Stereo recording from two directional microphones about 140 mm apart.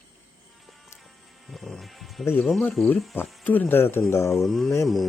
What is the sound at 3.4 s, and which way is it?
Speech, 10° left (ahead or behind).